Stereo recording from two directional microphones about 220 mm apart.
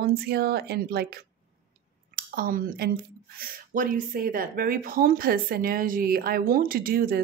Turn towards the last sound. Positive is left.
turn(degrees=-40)  # may be behind; listen again after turning